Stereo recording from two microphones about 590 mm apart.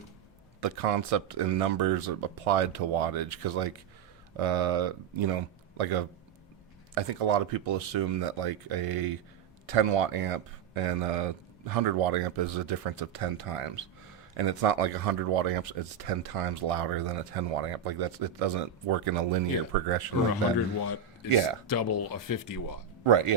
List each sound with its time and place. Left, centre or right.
0.6 s speech: right
20.8 s speech: left
23.0 s speech: right